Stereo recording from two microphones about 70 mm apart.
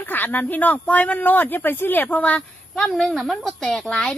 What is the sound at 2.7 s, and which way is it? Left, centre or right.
A woman's voice, centre.